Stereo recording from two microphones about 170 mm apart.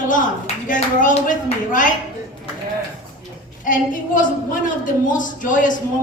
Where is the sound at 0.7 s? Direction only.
50° left (ahead or behind).